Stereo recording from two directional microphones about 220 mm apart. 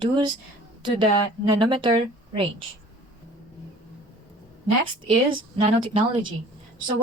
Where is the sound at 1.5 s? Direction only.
20° right (ahead or behind).